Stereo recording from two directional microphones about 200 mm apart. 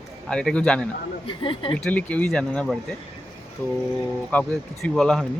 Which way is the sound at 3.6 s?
10° left (ahead or behind).